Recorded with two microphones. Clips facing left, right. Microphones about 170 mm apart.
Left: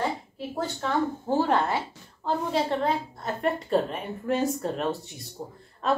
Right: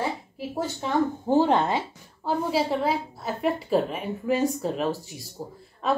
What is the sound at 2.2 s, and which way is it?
A woman's voice, 5° right (ahead or behind).